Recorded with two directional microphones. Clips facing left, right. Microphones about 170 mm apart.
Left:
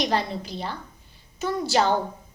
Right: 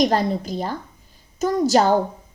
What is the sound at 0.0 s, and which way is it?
A woman's voice, 45° right (ahead or behind).